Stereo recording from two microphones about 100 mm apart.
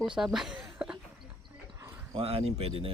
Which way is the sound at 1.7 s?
30° right (ahead or behind).